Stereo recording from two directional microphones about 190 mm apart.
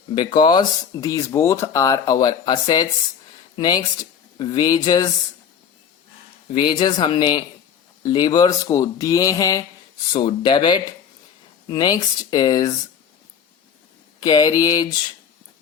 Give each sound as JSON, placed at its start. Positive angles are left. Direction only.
{"t": 0.1, "sound": "speech", "side_deg": 25}
{"t": 6.5, "sound": "speech", "side_deg": 25}
{"t": 14.2, "sound": "speech", "side_deg": 20}